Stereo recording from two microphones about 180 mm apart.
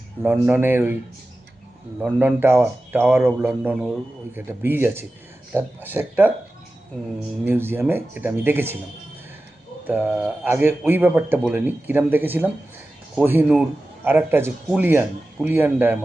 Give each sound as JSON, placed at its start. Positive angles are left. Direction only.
{"t": 0.2, "sound": "speech", "side_deg": -10}
{"t": 2.0, "sound": "speech", "side_deg": -10}
{"t": 7.4, "sound": "speech", "side_deg": -10}
{"t": 9.8, "sound": "speech", "side_deg": -10}